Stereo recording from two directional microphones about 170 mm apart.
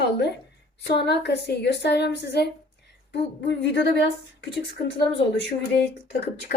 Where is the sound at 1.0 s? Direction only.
80° left.